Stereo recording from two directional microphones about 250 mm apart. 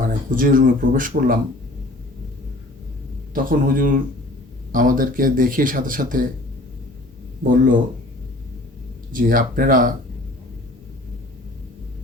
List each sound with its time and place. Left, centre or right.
0.3 s speech: right
3.3 s speech: right
7.4 s speech: right
9.1 s speech: right